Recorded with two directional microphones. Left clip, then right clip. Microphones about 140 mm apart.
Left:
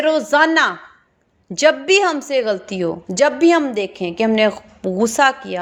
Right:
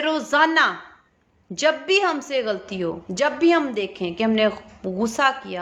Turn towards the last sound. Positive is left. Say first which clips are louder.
# left 5 dB
turn(degrees=50)  # may be behind; listen again after turning